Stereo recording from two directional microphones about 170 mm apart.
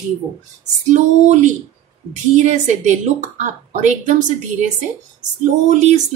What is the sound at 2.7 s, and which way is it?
Speech, 45° right (ahead or behind).